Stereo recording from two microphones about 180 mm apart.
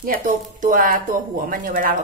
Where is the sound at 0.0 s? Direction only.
50° right (ahead or behind).